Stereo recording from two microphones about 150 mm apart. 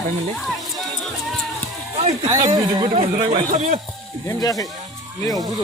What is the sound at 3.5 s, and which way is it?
Speech, 50° right (ahead or behind).